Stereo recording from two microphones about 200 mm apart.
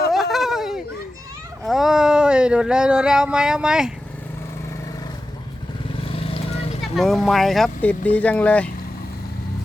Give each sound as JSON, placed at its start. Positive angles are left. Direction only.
{"t": 0.1, "sound": "a sound", "side_deg": 0}
{"t": 1.6, "sound": "speech", "side_deg": 0}
{"t": 6.1, "sound": "vehicle", "side_deg": 25}
{"t": 6.9, "sound": "speech", "side_deg": 0}